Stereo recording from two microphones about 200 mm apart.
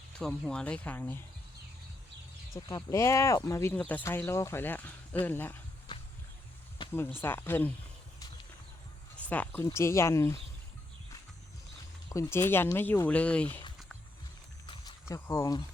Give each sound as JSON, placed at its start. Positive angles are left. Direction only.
{"t": 0.2, "sound": "speech", "side_deg": 5}
{"t": 2.6, "sound": "speech", "side_deg": 20}
{"t": 6.8, "sound": "a sound", "side_deg": 25}
{"t": 7.2, "sound": "speech", "side_deg": 10}
{"t": 9.1, "sound": "speech", "side_deg": 5}
{"t": 12.0, "sound": "speech", "side_deg": 15}
{"t": 15.1, "sound": "speech", "side_deg": 15}